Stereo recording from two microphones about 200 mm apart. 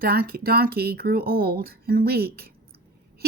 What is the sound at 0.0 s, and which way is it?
A woman's voice, 50° right (ahead or behind).